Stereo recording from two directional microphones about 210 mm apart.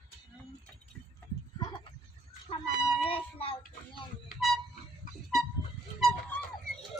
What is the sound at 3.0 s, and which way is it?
Speech, 25° left (ahead or behind).